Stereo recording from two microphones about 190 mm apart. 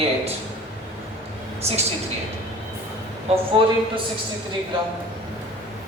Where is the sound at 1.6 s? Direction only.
35° right (ahead or behind).